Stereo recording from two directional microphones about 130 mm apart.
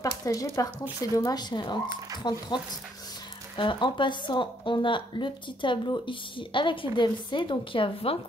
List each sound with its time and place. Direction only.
0.0 s a woman's voice: 25° left (ahead or behind)
3.5 s a woman's voice: 40° left (ahead or behind)